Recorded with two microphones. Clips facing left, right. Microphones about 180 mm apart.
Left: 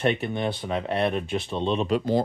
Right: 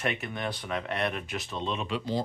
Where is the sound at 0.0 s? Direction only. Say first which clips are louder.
Left 7 dB; 30° left (ahead or behind).